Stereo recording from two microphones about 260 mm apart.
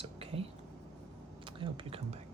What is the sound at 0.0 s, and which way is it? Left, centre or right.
Whispering, right.